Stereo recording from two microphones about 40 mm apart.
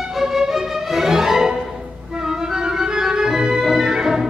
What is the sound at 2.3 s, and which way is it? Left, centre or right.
Organ, centre.